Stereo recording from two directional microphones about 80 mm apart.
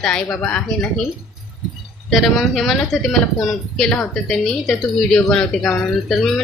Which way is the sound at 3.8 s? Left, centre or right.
Centre.